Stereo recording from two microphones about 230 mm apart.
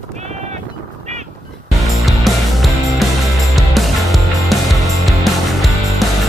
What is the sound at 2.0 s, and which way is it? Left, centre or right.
Music, centre.